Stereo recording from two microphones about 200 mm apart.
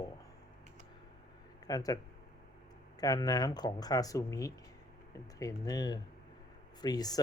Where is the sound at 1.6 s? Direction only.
20° left (ahead or behind).